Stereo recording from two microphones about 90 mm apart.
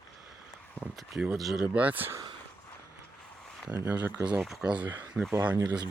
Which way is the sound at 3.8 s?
15° right (ahead or behind).